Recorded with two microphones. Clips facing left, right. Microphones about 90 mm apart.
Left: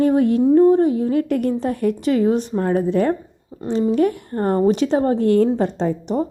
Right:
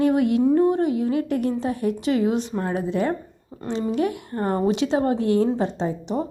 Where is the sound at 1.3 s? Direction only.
50° left (ahead or behind).